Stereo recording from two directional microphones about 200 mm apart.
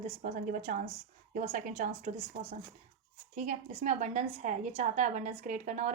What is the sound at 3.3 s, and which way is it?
A woman's voice, 35° right (ahead or behind).